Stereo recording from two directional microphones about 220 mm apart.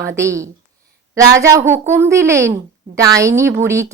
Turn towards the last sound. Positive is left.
turn(degrees=-15)  # may be behind; listen again after turning